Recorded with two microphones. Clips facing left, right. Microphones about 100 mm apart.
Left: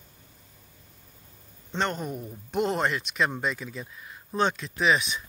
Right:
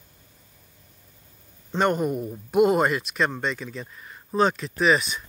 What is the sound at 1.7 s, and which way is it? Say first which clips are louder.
Speech: right 7 dB; 10° right (ahead or behind).